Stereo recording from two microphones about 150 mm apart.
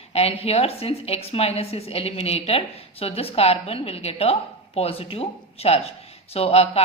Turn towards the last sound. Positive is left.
turn(degrees=40)  # may be behind; listen again after turning